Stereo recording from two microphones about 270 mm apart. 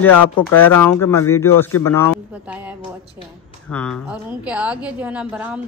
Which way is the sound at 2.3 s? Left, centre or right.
Centre.